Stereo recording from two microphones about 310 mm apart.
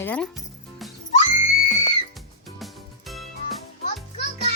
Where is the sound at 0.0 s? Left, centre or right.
Centre.